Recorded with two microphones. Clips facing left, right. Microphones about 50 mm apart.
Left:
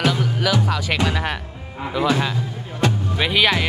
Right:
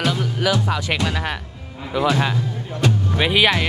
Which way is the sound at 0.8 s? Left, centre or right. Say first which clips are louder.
Left 1 dB; centre.